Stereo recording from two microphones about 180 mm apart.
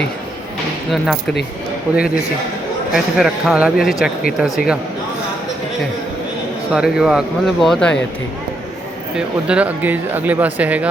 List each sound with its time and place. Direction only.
0.9 s speech: centre (ahead or behind)
2.9 s speech: centre (ahead or behind)
6.7 s speech: 5° right (ahead or behind)
9.1 s speech: 5° right (ahead or behind)